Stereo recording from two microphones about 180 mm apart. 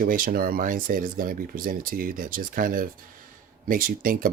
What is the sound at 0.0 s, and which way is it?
Speech, 50° right (ahead or behind).